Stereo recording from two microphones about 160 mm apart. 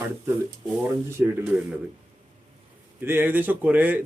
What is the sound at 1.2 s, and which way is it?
Speech, 10° right (ahead or behind).